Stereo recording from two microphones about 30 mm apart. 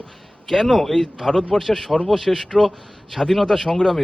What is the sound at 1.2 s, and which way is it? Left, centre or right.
Speech, centre.